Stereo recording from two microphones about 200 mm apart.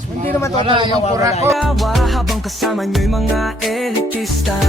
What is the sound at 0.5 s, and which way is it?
Speech, 25° right (ahead or behind).